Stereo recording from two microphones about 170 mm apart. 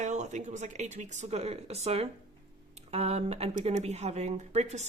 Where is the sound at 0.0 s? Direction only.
45° right (ahead or behind).